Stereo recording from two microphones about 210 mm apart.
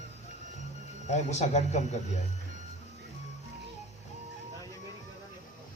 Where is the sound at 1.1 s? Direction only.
35° left (ahead or behind).